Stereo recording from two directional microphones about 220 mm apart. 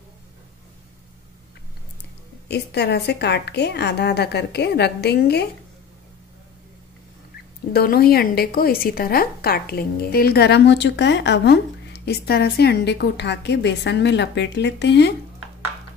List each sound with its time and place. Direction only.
2.4 s a woman's voice: 50° left (ahead or behind)
7.7 s a woman's voice: 45° left (ahead or behind)